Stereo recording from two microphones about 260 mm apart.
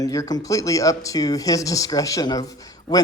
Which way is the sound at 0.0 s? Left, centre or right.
Centre.